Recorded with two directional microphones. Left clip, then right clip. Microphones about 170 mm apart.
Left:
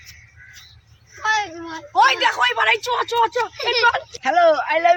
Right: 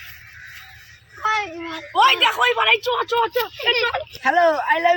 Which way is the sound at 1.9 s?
15° left (ahead or behind).